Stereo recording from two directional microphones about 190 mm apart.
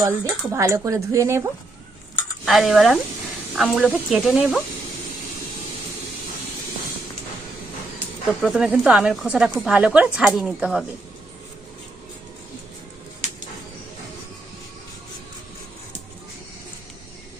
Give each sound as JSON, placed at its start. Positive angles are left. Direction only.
{"t": 0.0, "sound": "speech", "side_deg": -15}
{"t": 2.4, "sound": "speech", "side_deg": 0}
{"t": 8.4, "sound": "speech", "side_deg": 0}